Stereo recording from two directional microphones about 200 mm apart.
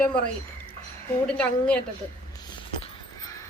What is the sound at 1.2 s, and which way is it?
Speech, 5° left (ahead or behind).